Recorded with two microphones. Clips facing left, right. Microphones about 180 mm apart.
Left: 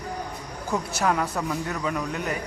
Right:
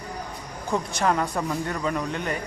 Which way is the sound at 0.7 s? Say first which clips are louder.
Right 1 dB; 5° left (ahead or behind).